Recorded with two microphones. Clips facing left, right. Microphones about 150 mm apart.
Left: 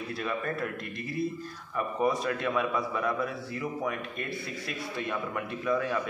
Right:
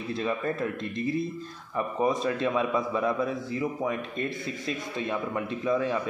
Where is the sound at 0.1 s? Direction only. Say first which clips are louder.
Right 5 dB; 20° right (ahead or behind).